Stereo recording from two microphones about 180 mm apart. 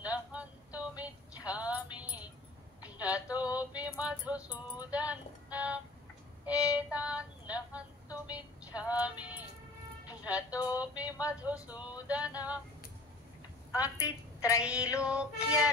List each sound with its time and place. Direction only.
0.0 s music: 5° right (ahead or behind)
2.8 s a sound: 5° right (ahead or behind)
3.5 s music: 10° right (ahead or behind)
4.5 s music: 20° left (ahead or behind)
4.9 s music: 10° right (ahead or behind)
6.4 s child singing: 5° right (ahead or behind)
10.0 s vehicle: 10° right (ahead or behind)
10.5 s music: 20° left (ahead or behind)
10.8 s music: 10° right (ahead or behind)
11.3 s speech: 5° right (ahead or behind)
12.1 s music: 5° right (ahead or behind)
14.0 s a sound: 20° left (ahead or behind)
14.6 s music: 5° right (ahead or behind)